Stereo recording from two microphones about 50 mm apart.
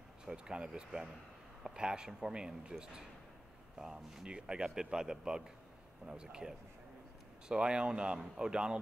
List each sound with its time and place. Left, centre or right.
0.2 s speech: centre